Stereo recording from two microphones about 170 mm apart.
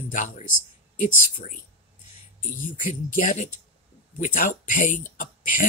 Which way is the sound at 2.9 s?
50° left (ahead or behind).